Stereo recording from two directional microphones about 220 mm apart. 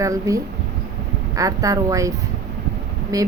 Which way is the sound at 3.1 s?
15° right (ahead or behind).